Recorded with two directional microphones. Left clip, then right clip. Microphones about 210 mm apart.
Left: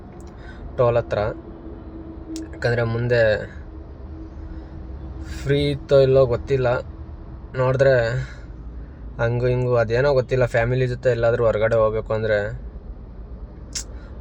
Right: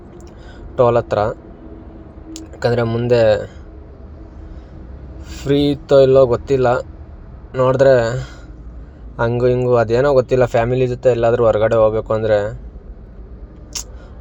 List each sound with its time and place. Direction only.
0.8 s speech: 15° right (ahead or behind)
5.3 s speech: 10° right (ahead or behind)
13.7 s a sound: 15° right (ahead or behind)